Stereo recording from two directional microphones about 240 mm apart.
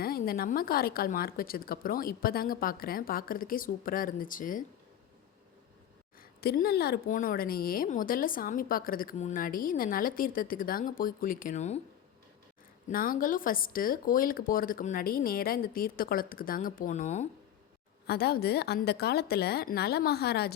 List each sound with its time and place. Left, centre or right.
0.0 s speech: left
6.4 s speech: left
12.9 s speech: left
18.0 s speech: left